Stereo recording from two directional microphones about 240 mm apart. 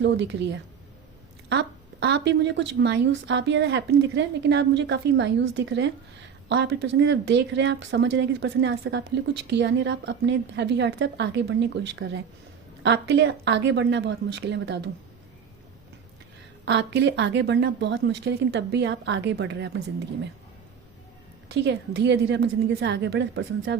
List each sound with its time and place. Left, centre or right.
0.0 s speech: right
1.5 s speech: right
16.6 s speech: right
21.5 s speech: right